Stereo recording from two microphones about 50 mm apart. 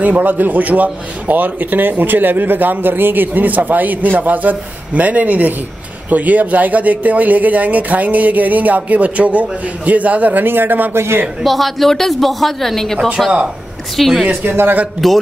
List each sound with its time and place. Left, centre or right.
0.0 s speech: right
11.4 s speech: centre
14.4 s a man's voice: right
15.0 s speech: centre